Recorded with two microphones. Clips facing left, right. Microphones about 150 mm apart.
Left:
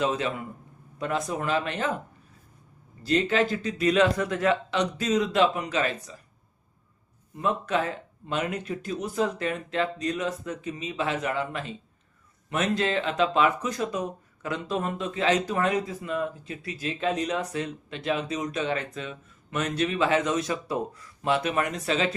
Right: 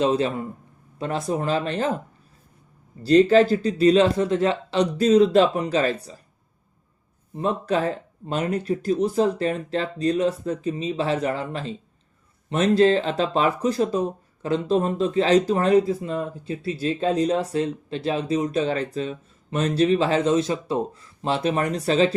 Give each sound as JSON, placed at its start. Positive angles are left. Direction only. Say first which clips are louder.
{"t": 0.0, "sound": "speech", "louder": "right 6 dB", "side_deg": -30}
{"t": 3.0, "sound": "speech", "louder": "right 9 dB", "side_deg": -35}
{"t": 7.3, "sound": "speech", "louder": "right 3 dB", "side_deg": -30}